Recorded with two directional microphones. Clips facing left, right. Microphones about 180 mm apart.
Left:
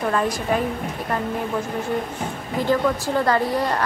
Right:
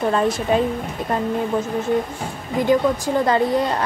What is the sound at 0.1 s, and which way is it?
Speech, 25° right (ahead or behind).